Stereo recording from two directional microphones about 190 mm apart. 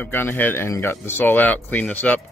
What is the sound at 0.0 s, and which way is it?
Speech, 10° left (ahead or behind).